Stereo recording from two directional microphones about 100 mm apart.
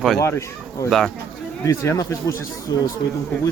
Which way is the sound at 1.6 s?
35° left (ahead or behind).